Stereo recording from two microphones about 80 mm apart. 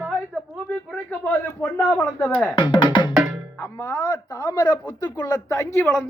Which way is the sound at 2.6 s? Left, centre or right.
Left.